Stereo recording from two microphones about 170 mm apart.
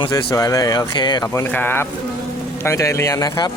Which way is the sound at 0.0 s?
20° left (ahead or behind).